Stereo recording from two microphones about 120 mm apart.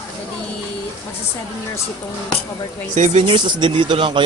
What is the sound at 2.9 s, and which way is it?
Speech, 85° right.